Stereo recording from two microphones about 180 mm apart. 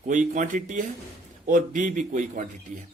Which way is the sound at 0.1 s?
45° right (ahead or behind).